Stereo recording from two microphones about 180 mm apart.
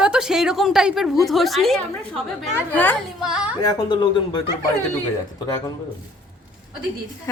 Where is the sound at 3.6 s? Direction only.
25° left (ahead or behind).